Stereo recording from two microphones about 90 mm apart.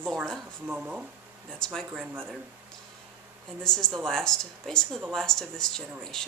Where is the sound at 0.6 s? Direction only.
15° right (ahead or behind).